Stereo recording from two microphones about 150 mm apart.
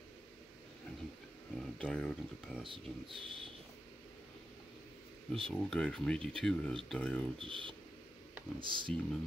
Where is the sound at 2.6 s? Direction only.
35° right (ahead or behind).